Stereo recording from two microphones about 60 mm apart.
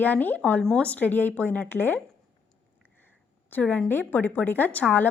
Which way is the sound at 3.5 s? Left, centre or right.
Left.